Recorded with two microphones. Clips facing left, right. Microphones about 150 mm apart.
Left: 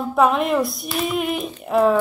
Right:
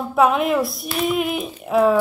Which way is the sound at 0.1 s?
Centre (ahead or behind).